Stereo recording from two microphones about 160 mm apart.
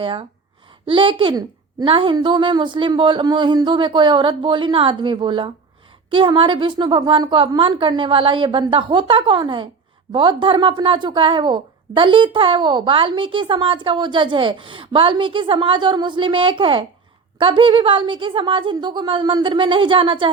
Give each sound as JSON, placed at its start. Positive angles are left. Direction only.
{"t": 0.0, "sound": "a woman's voice", "side_deg": -35}